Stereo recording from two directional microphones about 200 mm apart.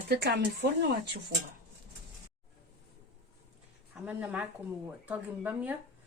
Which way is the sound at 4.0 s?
5° right (ahead or behind).